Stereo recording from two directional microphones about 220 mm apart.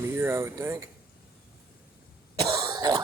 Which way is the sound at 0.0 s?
10° right (ahead or behind).